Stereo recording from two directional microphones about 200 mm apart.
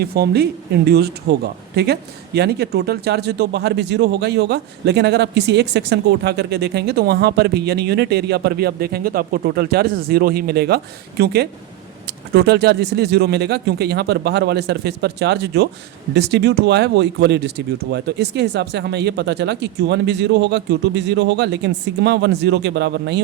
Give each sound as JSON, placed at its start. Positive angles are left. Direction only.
{"t": 0.0, "sound": "speech", "side_deg": -50}